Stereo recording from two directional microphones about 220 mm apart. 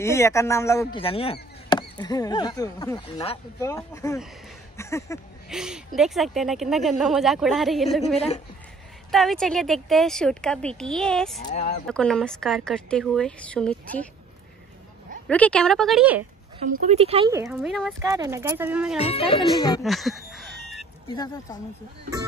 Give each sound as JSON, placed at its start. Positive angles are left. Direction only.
{"t": 0.0, "sound": "speech", "side_deg": 15}
{"t": 1.0, "sound": "speech", "side_deg": 25}
{"t": 5.5, "sound": "speech", "side_deg": -5}
{"t": 9.1, "sound": "speech", "side_deg": 0}
{"t": 11.4, "sound": "speech", "side_deg": 30}
{"t": 11.9, "sound": "speech", "side_deg": 5}
{"t": 15.2, "sound": "speech", "side_deg": 5}
{"t": 16.8, "sound": "speech", "side_deg": -25}
{"t": 17.3, "sound": "speech", "side_deg": -15}
{"t": 17.6, "sound": "speech", "side_deg": 0}
{"t": 18.1, "sound": "speech", "side_deg": -15}
{"t": 18.9, "sound": "speech", "side_deg": 25}
{"t": 19.8, "sound": "a sound", "side_deg": 0}
{"t": 21.1, "sound": "speech", "side_deg": 20}